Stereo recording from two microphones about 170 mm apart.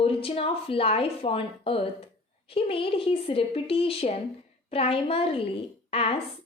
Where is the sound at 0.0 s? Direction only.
35° left (ahead or behind).